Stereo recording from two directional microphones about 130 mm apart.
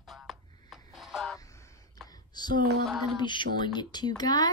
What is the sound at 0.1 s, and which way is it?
Music, centre (ahead or behind).